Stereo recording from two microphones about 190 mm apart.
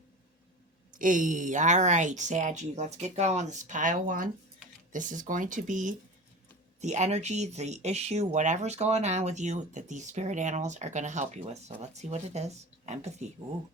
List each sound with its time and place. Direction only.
0.9 s speech: 45° right (ahead or behind)